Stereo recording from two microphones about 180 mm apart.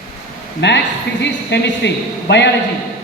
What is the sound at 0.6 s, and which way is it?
A man's voice, 75° left (ahead or behind).